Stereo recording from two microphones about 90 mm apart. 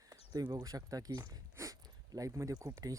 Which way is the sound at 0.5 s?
45° right (ahead or behind).